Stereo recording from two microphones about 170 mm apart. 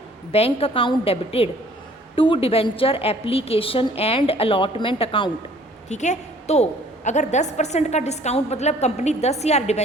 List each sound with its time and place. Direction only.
0.3 s a woman's voice: 35° left (ahead or behind)
5.9 s a woman's voice: 45° left (ahead or behind)